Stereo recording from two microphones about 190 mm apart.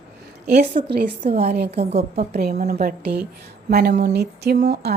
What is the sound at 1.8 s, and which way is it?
Speech, 35° right (ahead or behind).